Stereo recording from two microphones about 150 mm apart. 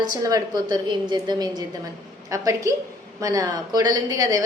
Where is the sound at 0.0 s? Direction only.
25° right (ahead or behind).